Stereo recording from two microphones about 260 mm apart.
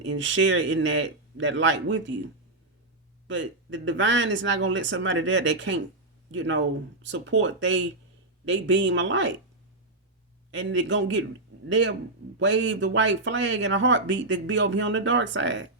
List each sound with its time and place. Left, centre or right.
0.0 s speech: right
10.5 s speech: right